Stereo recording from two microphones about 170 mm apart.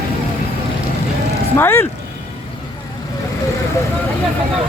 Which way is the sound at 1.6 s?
15° left (ahead or behind).